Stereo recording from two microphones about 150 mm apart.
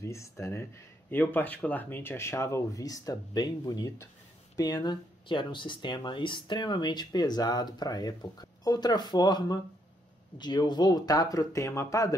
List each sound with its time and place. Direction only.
0.0 s speech: 20° left (ahead or behind)